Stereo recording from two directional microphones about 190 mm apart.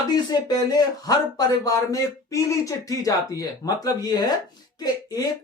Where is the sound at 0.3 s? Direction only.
20° left (ahead or behind).